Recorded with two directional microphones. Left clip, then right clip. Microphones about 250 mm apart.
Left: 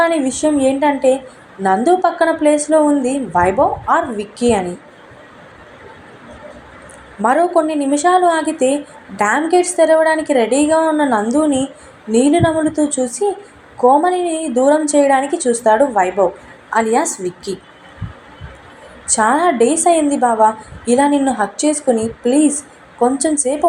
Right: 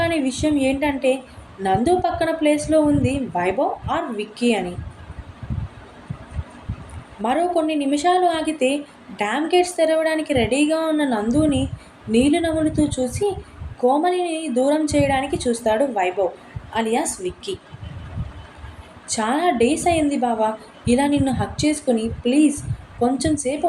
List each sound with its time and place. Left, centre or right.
0.3 s a woman's voice: centre
7.2 s a woman's voice: centre
19.0 s a woman's voice: centre